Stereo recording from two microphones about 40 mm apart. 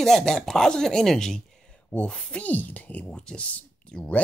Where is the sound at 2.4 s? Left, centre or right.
Left.